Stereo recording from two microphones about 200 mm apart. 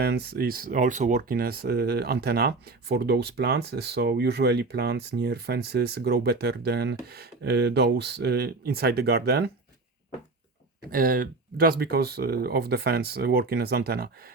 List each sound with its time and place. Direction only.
0.0 s speech: 55° right (ahead or behind)
10.9 s speech: 45° right (ahead or behind)